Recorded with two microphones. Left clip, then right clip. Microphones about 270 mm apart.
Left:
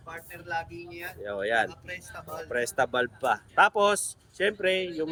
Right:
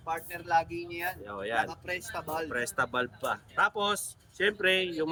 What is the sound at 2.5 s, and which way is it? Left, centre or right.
Speech, centre.